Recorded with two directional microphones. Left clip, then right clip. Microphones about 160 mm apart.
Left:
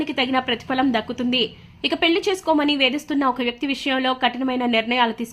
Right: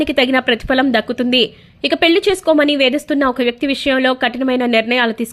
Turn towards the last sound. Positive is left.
turn(degrees=-25)  # may be behind; listen again after turning